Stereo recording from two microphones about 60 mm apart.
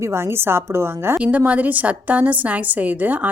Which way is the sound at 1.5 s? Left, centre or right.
Right.